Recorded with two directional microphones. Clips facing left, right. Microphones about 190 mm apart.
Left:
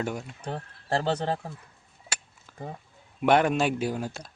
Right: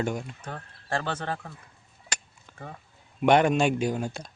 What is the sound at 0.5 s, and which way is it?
Speech, 35° left (ahead or behind).